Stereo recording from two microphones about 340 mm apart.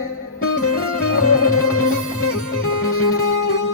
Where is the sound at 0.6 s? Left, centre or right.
Left.